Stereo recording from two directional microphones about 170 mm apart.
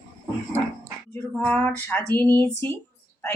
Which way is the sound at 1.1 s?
10° left (ahead or behind).